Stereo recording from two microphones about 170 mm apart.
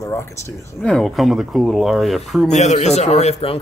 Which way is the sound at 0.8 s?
Centre (ahead or behind).